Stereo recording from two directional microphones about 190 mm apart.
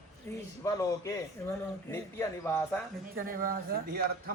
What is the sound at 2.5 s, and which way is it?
Speech, 10° left (ahead or behind).